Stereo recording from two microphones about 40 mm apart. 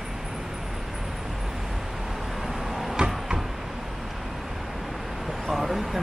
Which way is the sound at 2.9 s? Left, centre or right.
Centre.